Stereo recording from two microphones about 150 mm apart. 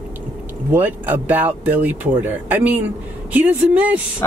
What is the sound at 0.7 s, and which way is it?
Speech, 10° right (ahead or behind).